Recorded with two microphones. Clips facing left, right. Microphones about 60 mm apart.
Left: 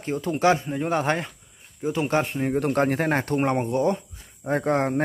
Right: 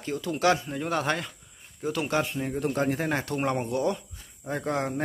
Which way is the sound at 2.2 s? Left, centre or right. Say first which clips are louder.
Left 5 dB; left.